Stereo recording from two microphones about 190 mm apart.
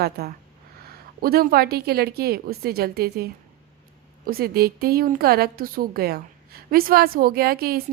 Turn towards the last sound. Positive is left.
turn(degrees=-50)  # may be behind; listen again after turning